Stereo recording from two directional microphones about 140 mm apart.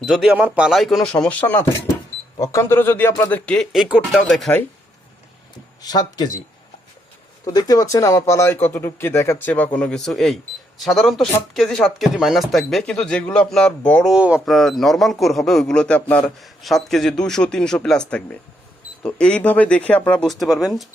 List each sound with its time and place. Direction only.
0.0 s speech: centre (ahead or behind)
3.7 s speech: 5° right (ahead or behind)
4.2 s speech: 5° left (ahead or behind)
5.8 s speech: 30° left (ahead or behind)
7.4 s speech: 25° left (ahead or behind)
9.7 s speech: 5° left (ahead or behind)
14.1 s speech: 10° right (ahead or behind)